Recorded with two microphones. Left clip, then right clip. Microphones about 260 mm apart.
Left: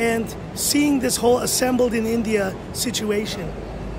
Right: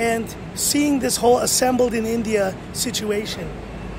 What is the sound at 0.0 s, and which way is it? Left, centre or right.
Speech, centre.